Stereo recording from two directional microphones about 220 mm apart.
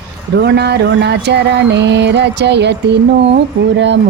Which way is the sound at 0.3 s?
50° right (ahead or behind).